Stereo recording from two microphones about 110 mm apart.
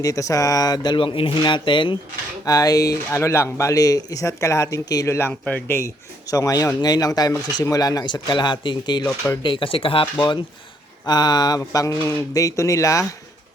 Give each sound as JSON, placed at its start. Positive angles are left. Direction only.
{"t": 0.0, "sound": "speech", "side_deg": 30}
{"t": 2.4, "sound": "speech", "side_deg": 35}
{"t": 5.3, "sound": "speech", "side_deg": 10}
{"t": 5.6, "sound": "speech", "side_deg": 25}